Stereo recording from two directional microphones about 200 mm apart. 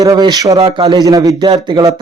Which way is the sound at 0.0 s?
20° right (ahead or behind).